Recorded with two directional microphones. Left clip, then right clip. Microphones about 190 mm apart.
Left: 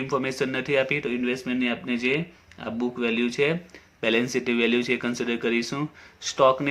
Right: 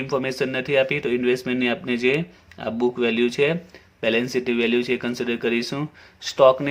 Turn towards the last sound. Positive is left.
turn(degrees=-25)  # may be behind; listen again after turning